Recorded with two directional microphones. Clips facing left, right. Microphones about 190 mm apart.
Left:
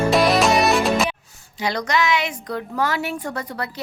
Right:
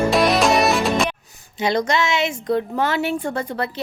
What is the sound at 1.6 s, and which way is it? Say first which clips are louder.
A woman's voice: right 2 dB; 25° right (ahead or behind).